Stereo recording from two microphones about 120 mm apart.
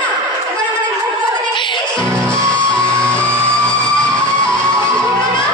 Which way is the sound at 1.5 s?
40° left (ahead or behind).